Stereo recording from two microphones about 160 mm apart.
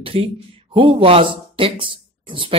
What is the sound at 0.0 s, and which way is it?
Speech, 35° right (ahead or behind).